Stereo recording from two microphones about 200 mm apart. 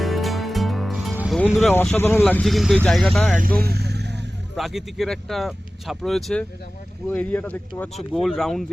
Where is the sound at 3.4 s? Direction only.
45° right (ahead or behind).